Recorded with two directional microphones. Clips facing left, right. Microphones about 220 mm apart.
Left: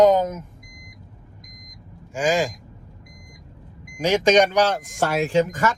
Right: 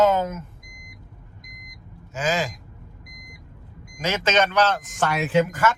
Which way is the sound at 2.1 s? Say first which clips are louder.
Left 4 dB; 15° left (ahead or behind).